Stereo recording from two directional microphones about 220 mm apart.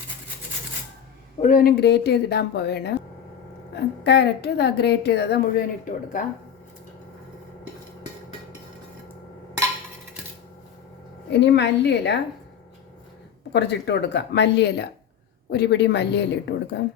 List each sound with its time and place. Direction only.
1.4 s a woman's voice: 40° left (ahead or behind)
4.0 s a woman's voice: 50° left (ahead or behind)
11.3 s a woman's voice: 50° left (ahead or behind)
13.5 s a woman's voice: 50° left (ahead or behind)